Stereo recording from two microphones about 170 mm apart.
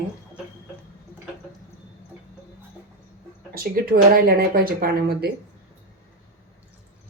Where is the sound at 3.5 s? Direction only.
60° right (ahead or behind).